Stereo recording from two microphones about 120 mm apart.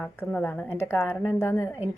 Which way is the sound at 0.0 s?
10° left (ahead or behind).